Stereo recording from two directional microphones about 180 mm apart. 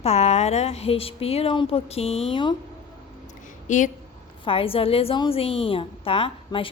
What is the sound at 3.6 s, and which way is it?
Speech, 45° left (ahead or behind).